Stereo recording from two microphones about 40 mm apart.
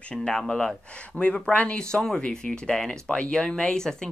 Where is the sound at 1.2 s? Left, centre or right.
Left.